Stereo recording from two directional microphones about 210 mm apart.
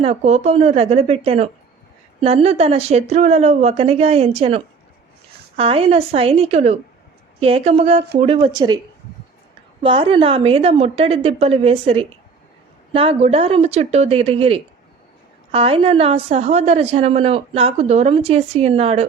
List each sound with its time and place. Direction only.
0.0 s a woman's voice: 30° right (ahead or behind)
9.8 s a woman's voice: 25° right (ahead or behind)